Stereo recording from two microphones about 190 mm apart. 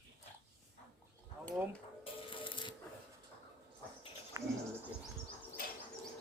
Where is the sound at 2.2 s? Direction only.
25° left (ahead or behind).